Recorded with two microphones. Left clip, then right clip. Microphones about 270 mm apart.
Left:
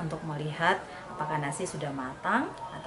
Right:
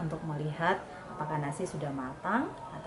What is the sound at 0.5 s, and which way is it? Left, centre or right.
A woman's voice, centre.